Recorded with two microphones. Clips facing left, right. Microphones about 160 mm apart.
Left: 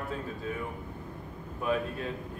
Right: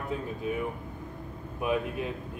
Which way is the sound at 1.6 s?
15° right (ahead or behind).